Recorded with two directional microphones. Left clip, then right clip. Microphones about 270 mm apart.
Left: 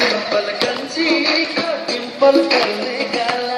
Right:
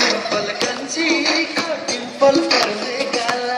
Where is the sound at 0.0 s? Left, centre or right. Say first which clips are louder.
Left 1 dB; right.